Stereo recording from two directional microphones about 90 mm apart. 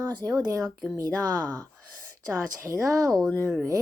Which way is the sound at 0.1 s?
40° right (ahead or behind).